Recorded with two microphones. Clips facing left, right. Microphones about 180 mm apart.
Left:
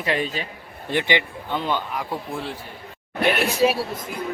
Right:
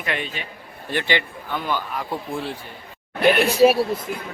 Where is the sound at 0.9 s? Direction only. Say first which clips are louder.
Left 1 dB; 15° left (ahead or behind).